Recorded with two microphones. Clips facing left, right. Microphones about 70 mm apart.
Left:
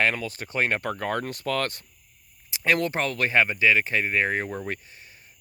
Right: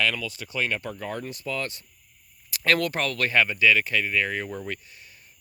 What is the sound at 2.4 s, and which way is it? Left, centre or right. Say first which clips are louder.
Speech: even; centre.